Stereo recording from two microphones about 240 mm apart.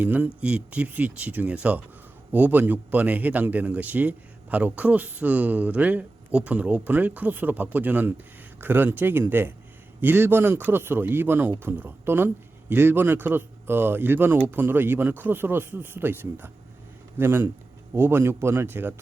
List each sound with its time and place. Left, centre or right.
0.0 s a man's voice: centre